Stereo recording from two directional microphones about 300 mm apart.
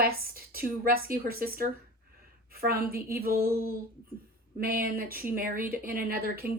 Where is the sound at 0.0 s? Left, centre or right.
Right.